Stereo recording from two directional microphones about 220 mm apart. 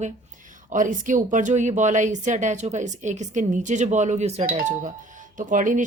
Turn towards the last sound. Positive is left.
turn(degrees=-35)  # may be behind; listen again after turning